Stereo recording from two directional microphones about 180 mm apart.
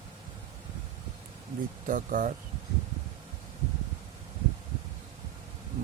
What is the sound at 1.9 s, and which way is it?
Speech, 50° right (ahead or behind).